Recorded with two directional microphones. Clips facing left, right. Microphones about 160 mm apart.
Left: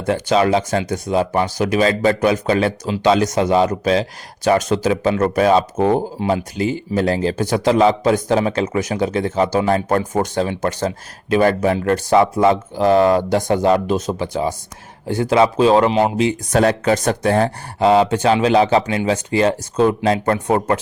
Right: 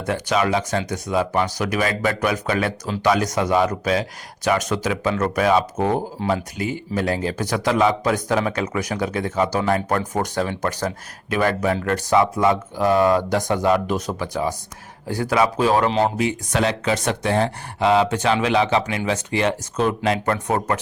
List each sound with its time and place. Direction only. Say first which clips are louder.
0.0 s speech: left 5 dB; 30° left (ahead or behind)
15.9 s speech: left 3 dB; 10° left (ahead or behind)
16.5 s speech: left 7 dB; 45° left (ahead or behind)